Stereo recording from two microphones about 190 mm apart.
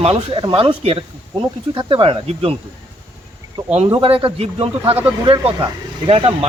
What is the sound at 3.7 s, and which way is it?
Speech, 30° right (ahead or behind).